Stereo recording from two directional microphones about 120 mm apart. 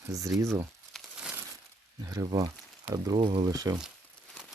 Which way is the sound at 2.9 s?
30° right (ahead or behind).